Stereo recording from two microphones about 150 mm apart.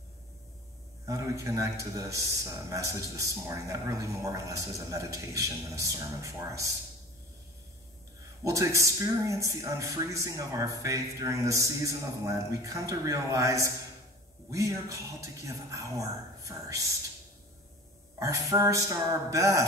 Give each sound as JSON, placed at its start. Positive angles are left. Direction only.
{"t": 1.0, "sound": "a man's voice", "side_deg": -20}
{"t": 8.5, "sound": "speech", "side_deg": -20}
{"t": 18.2, "sound": "speech", "side_deg": -20}